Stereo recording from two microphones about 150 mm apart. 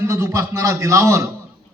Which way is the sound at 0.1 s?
20° right (ahead or behind).